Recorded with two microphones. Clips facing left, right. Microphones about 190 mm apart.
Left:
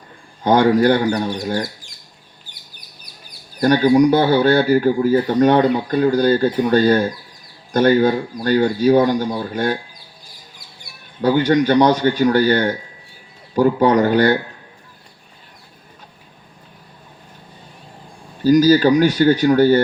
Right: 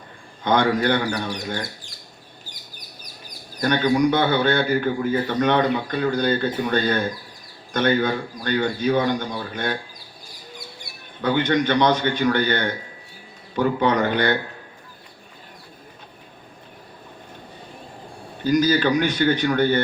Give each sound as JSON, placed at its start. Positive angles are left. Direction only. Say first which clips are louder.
{"t": 0.4, "sound": "a man's voice", "louder": "left 6 dB", "side_deg": 35}
{"t": 3.6, "sound": "a man's voice", "louder": "left 6 dB", "side_deg": 40}
{"t": 11.2, "sound": "a man's voice", "louder": "left 5 dB", "side_deg": 40}
{"t": 18.4, "sound": "a man's voice", "louder": "left 7 dB", "side_deg": 35}